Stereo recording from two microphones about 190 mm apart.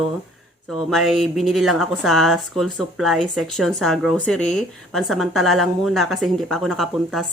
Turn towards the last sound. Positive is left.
turn(degrees=0)  # may be behind; listen again after turning